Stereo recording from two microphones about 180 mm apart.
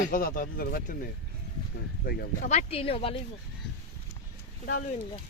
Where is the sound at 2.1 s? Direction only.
50° left (ahead or behind).